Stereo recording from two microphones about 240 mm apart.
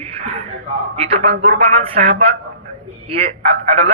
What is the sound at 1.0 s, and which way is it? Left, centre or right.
A man's voice, right.